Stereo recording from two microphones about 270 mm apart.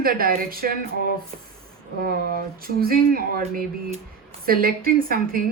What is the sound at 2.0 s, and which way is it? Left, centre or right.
Speech, right.